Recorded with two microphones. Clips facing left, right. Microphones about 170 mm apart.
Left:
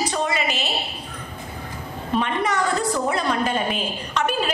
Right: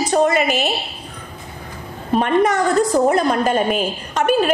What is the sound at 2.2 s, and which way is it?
A woman's voice, 45° right (ahead or behind).